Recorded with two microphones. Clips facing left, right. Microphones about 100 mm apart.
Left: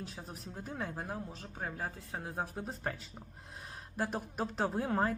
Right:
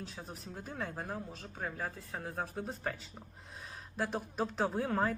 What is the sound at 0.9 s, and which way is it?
Speech, 15° left (ahead or behind).